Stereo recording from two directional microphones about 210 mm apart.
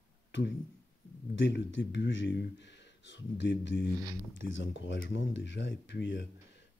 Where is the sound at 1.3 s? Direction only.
60° left (ahead or behind).